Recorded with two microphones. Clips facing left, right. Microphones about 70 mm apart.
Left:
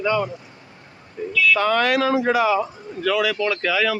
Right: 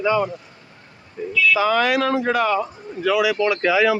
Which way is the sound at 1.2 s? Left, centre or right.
Centre.